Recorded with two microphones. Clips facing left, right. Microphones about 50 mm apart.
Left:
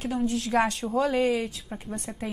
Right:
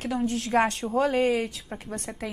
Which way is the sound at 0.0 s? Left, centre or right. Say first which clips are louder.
Even; right.